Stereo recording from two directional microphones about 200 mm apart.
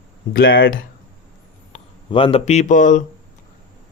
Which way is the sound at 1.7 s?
30° left (ahead or behind).